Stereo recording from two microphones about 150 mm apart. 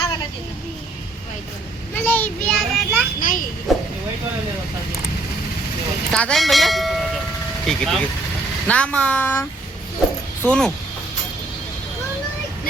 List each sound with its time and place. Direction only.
2.0 s child singing: 10° left (ahead or behind)
3.2 s children playing: 60° left (ahead or behind)
3.7 s a sound: centre (ahead or behind)
6.1 s speech: 5° left (ahead or behind)